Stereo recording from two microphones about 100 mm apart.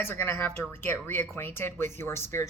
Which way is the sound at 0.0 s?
25° left (ahead or behind).